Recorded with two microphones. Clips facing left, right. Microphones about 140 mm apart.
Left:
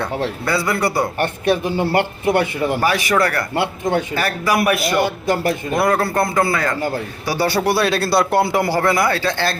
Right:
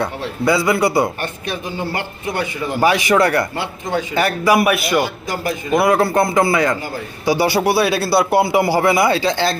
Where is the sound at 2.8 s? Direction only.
20° right (ahead or behind).